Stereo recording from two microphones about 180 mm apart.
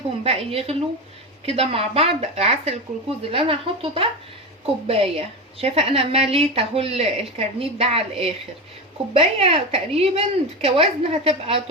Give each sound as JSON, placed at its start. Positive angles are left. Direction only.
{"t": 0.3, "sound": "a woman's voice", "side_deg": -35}